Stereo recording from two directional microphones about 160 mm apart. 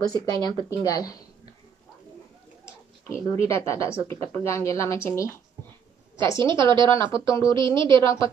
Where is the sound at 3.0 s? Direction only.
20° left (ahead or behind).